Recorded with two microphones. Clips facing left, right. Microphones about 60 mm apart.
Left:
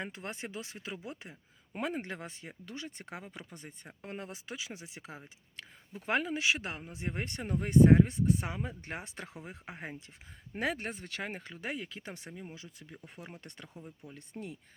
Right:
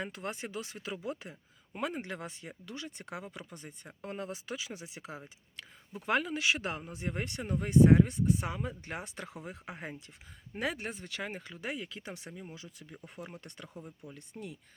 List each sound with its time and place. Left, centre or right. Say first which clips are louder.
0.0 s speech: right 2 dB; left
1.7 s speech: even; left
6.1 s speech: even; left
9.7 s speech: even; centre
10.5 s speech: left 1 dB; left